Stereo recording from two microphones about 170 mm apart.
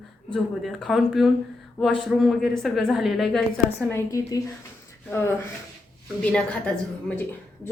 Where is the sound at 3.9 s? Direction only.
20° left (ahead or behind).